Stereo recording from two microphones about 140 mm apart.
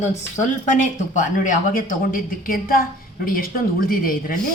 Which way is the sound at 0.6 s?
65° left (ahead or behind).